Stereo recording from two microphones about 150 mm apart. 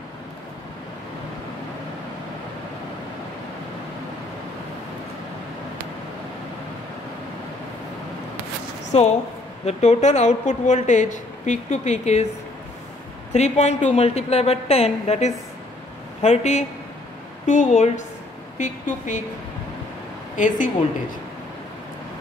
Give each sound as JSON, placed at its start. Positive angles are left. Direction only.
{"t": 8.9, "sound": "a woman's voice", "side_deg": 45}
{"t": 13.3, "sound": "a woman's voice", "side_deg": 50}
{"t": 20.3, "sound": "speech", "side_deg": 60}